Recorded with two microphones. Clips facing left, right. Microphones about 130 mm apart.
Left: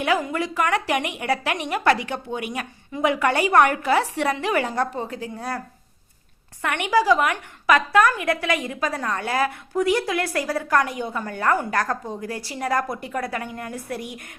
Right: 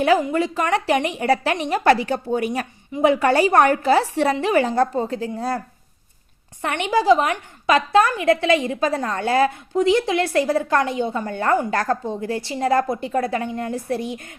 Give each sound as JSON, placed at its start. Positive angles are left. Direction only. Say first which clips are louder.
{"t": 0.2, "sound": "a woman's voice", "louder": "right 3 dB", "side_deg": -25}